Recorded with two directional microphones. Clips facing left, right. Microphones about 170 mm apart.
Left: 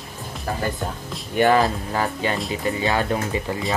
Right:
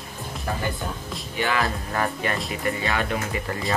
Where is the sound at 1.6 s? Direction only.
20° left (ahead or behind).